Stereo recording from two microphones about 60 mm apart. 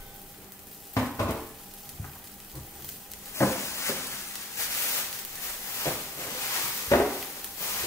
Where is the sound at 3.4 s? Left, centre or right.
Left.